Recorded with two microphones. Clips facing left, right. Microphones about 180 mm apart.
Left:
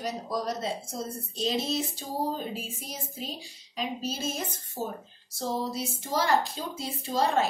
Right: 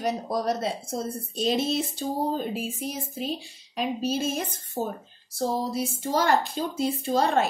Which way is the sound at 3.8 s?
60° right (ahead or behind).